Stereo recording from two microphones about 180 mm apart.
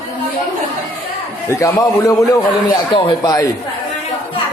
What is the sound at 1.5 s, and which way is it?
A man's voice, 15° left (ahead or behind).